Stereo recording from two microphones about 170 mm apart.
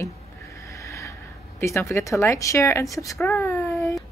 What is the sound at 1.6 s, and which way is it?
Speech, 15° left (ahead or behind).